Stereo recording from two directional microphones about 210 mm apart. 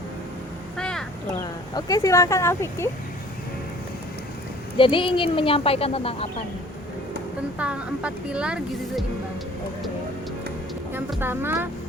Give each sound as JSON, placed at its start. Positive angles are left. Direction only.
{"t": 0.8, "sound": "a sound", "side_deg": 5}
{"t": 1.7, "sound": "speech", "side_deg": 15}
{"t": 4.8, "sound": "speech", "side_deg": 25}
{"t": 7.6, "sound": "a woman's voice", "side_deg": -5}
{"t": 10.9, "sound": "speech", "side_deg": -10}